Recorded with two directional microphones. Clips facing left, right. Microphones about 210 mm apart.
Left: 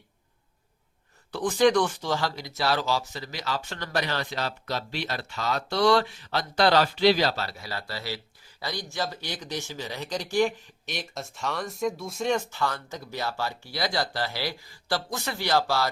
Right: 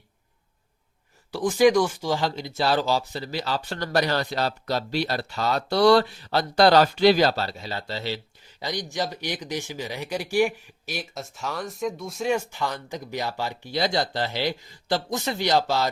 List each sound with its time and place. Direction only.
1.3 s speech: 10° right (ahead or behind); by 7.3 s 45° right (ahead or behind)
7.3 s speech: 25° right (ahead or behind)